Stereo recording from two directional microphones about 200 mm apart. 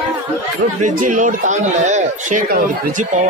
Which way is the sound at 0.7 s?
40° right (ahead or behind).